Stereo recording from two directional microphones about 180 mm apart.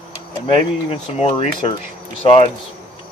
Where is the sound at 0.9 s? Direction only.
35° left (ahead or behind).